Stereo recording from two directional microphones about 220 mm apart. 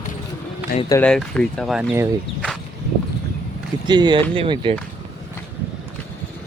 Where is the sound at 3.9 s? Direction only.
20° right (ahead or behind).